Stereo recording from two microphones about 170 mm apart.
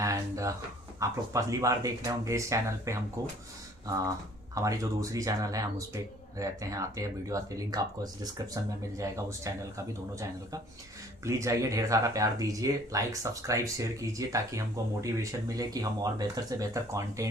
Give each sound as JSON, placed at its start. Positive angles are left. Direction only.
{"t": 0.0, "sound": "a sound", "side_deg": -20}
{"t": 0.9, "sound": "speech", "side_deg": -20}
{"t": 4.5, "sound": "speech", "side_deg": -20}